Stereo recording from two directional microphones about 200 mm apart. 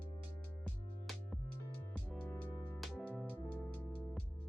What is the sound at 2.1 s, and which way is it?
Music, 5° left (ahead or behind).